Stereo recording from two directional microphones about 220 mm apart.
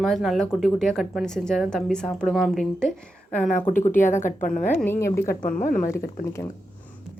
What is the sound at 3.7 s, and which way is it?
Speech, 35° left (ahead or behind).